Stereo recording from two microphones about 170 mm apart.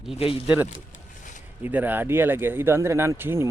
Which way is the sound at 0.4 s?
10° right (ahead or behind).